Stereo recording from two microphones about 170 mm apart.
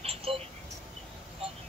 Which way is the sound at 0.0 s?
35° right (ahead or behind).